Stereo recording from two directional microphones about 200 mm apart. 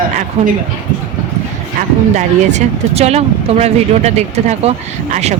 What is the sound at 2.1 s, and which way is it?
Speech, 35° right (ahead or behind).